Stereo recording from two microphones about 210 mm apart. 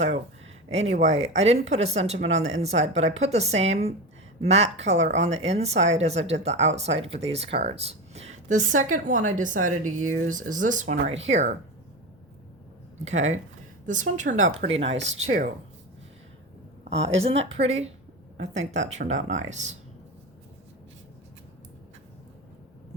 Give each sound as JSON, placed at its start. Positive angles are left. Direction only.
{"t": 0.7, "sound": "a woman's voice", "side_deg": -30}
{"t": 13.1, "sound": "a woman's voice", "side_deg": -35}
{"t": 16.8, "sound": "a woman's voice", "side_deg": -30}